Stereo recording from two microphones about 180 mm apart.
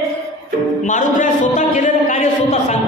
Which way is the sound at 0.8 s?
45° left (ahead or behind).